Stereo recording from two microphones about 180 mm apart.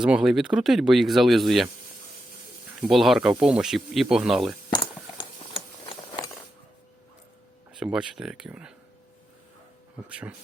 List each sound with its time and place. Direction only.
0.0 s speech: 5° right (ahead or behind)
2.8 s speech: centre (ahead or behind)
6.1 s a sound: 25° left (ahead or behind)
7.7 s speech: 5° right (ahead or behind)
10.1 s speech: 10° right (ahead or behind)